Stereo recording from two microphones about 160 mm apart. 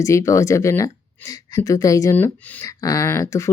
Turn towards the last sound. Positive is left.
turn(degrees=20)  # may be behind; listen again after turning